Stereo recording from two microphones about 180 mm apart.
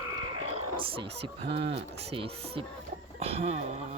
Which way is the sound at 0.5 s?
30° right (ahead or behind).